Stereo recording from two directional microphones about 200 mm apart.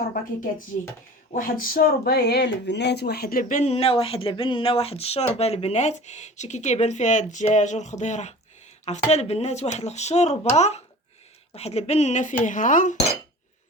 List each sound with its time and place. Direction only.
0.7 s speech: 45° left (ahead or behind)